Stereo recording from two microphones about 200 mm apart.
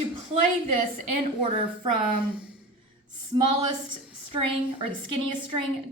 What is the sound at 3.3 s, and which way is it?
Speech, 25° right (ahead or behind).